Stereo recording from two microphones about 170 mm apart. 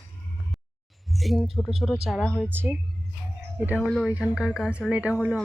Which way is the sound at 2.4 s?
10° right (ahead or behind).